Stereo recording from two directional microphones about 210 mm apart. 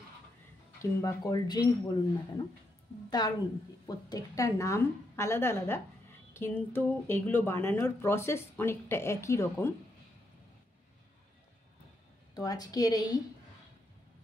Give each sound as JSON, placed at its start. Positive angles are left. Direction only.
{"t": 1.0, "sound": "speech", "side_deg": 20}
{"t": 12.4, "sound": "speech", "side_deg": 15}